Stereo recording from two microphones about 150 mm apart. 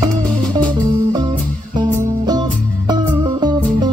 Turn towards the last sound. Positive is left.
turn(degrees=-30)  # may be behind; listen again after turning